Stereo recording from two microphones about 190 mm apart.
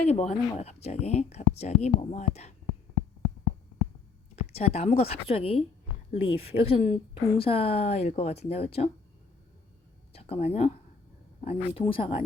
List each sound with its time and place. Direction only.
0.0 s a woman's voice: 35° left (ahead or behind)
4.5 s a woman's voice: 30° left (ahead or behind)
10.1 s speech: 30° left (ahead or behind)